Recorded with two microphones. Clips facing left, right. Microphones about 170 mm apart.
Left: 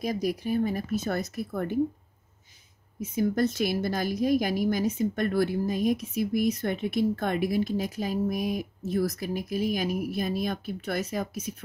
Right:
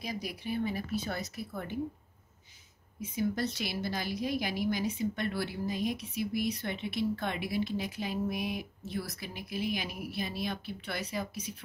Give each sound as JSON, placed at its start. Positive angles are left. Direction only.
{"t": 0.0, "sound": "a woman's voice", "side_deg": 45}
{"t": 3.0, "sound": "a woman's voice", "side_deg": 50}